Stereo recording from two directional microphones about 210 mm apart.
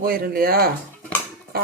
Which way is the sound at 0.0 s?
45° right (ahead or behind).